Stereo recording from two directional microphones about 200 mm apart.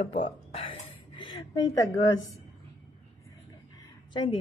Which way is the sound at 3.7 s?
25° left (ahead or behind).